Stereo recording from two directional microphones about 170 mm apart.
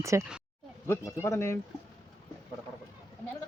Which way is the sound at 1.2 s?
15° left (ahead or behind).